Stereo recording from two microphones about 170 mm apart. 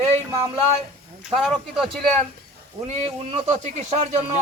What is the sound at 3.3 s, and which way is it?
Speech, 40° right (ahead or behind).